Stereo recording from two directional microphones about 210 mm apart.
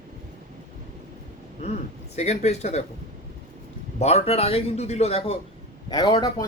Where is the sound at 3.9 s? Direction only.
30° left (ahead or behind).